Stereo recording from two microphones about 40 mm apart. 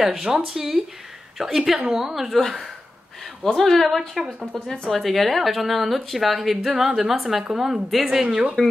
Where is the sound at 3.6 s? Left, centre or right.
Centre.